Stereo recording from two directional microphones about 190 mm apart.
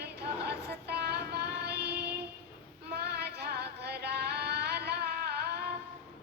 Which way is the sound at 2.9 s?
60° right (ahead or behind).